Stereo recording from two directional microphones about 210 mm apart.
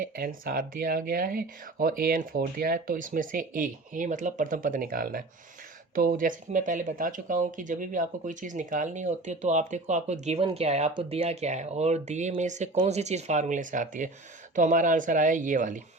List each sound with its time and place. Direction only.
0.0 s speech: 45° right (ahead or behind)